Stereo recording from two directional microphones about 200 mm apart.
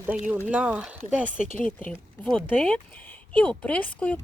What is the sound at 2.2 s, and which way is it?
Speech, 5° left (ahead or behind).